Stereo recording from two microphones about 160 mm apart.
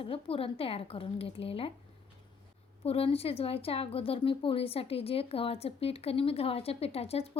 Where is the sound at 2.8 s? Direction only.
35° left (ahead or behind).